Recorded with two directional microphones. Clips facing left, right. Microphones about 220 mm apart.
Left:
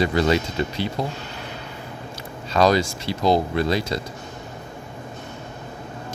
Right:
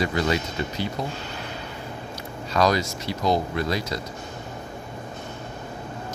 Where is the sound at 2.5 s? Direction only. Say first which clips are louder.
Left 4 dB; 25° left (ahead or behind).